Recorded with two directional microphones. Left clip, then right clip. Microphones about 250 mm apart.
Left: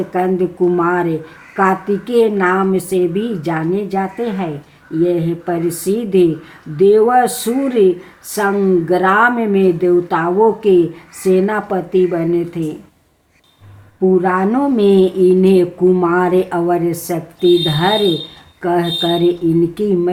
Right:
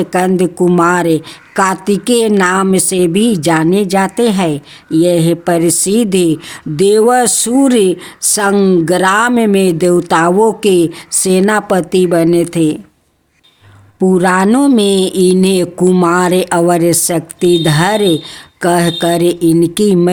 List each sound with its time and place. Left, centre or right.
0.1 s speech: right
14.1 s speech: right